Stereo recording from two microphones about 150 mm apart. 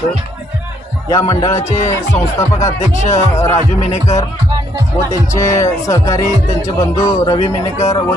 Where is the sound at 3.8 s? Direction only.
45° left (ahead or behind).